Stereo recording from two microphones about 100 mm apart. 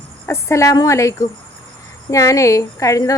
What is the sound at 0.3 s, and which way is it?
Speech, 30° left (ahead or behind).